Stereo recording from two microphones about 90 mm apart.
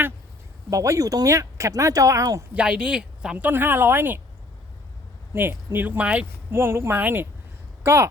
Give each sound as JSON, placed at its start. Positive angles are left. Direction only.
{"t": 0.7, "sound": "speech", "side_deg": -40}
{"t": 2.6, "sound": "speech", "side_deg": -10}
{"t": 5.3, "sound": "speech", "side_deg": -25}
{"t": 6.5, "sound": "speech", "side_deg": -25}